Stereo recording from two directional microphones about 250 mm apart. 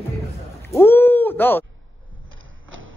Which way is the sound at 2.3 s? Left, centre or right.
Right.